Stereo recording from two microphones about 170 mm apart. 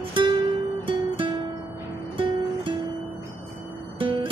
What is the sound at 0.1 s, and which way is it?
Music, 30° right (ahead or behind).